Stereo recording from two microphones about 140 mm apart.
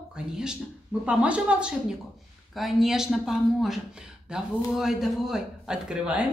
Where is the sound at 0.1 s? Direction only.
5° right (ahead or behind).